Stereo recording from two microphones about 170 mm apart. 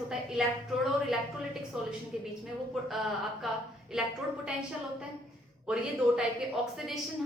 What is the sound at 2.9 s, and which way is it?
A woman's voice, centre (ahead or behind).